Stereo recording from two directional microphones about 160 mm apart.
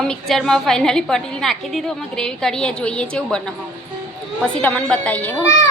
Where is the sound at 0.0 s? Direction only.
5° left (ahead or behind).